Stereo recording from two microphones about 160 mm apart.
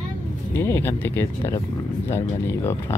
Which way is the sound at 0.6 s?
15° left (ahead or behind).